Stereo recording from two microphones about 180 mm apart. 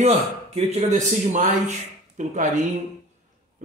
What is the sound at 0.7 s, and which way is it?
A man's voice, 40° right (ahead or behind).